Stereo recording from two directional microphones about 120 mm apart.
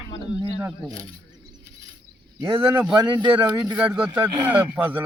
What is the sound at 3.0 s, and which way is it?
Speech, 35° right (ahead or behind).